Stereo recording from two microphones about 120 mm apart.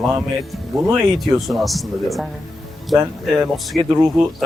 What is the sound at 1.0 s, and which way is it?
Speech, 30° right (ahead or behind).